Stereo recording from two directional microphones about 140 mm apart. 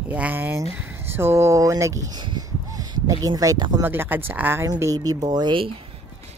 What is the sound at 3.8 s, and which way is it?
A woman's voice, 15° right (ahead or behind).